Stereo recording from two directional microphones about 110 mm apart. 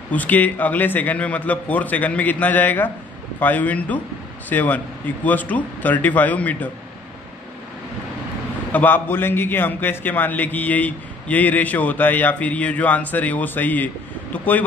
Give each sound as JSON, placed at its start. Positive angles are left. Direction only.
{"t": 0.1, "sound": "a man's voice", "side_deg": 15}
{"t": 8.7, "sound": "a man's voice", "side_deg": 20}